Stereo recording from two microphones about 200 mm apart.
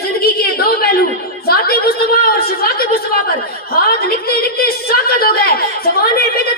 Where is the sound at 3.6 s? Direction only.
50° left (ahead or behind).